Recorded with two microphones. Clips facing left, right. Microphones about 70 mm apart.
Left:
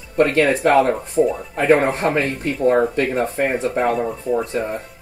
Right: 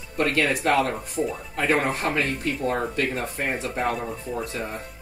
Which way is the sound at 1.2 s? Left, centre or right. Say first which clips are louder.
Left 10 dB; centre.